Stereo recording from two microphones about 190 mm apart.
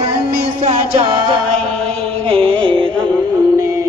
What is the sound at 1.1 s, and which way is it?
Music, 25° right (ahead or behind).